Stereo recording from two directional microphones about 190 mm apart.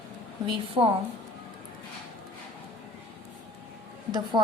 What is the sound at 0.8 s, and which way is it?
Speech, 20° right (ahead or behind).